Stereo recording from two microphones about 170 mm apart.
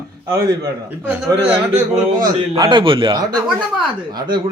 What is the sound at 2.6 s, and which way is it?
Speech, 30° right (ahead or behind).